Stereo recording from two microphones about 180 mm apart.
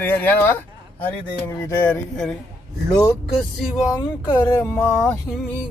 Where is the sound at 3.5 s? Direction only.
5° right (ahead or behind).